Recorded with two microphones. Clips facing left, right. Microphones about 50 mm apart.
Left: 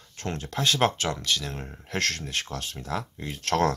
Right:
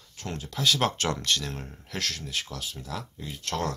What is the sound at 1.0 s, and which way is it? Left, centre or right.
Speech, centre.